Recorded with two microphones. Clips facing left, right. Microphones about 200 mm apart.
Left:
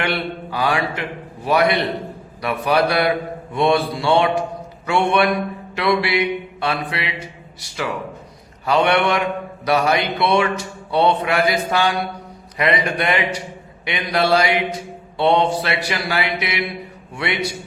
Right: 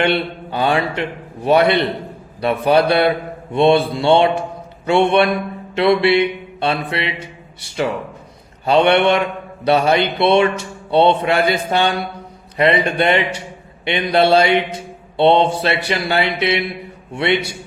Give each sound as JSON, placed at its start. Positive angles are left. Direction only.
{"t": 0.0, "sound": "speech", "side_deg": -25}
{"t": 5.7, "sound": "mantra", "side_deg": -25}
{"t": 8.6, "sound": "speech", "side_deg": -25}